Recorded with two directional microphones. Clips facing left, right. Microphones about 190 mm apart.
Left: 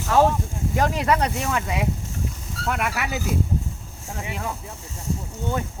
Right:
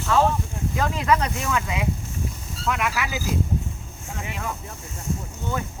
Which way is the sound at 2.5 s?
60° left (ahead or behind).